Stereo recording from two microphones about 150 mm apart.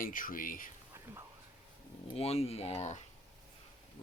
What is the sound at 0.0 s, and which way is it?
Speech, 65° left (ahead or behind).